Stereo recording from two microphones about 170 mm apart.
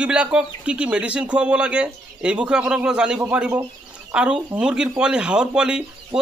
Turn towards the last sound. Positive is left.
turn(degrees=-5)  # may be behind; listen again after turning